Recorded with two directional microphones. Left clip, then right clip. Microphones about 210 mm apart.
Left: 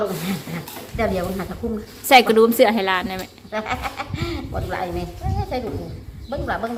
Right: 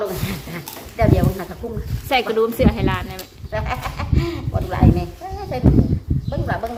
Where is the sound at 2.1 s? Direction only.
25° left (ahead or behind).